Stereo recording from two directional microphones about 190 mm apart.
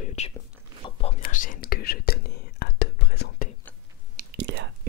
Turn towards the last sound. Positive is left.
turn(degrees=-70)  # may be behind; listen again after turning